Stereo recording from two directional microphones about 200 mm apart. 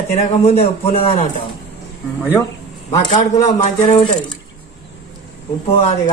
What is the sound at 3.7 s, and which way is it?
Speech, 25° left (ahead or behind).